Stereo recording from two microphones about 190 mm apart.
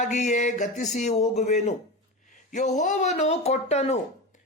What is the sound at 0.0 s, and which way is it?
A man's voice, 40° left (ahead or behind).